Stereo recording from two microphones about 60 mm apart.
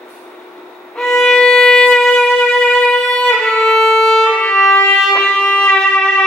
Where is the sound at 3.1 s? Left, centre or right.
Centre.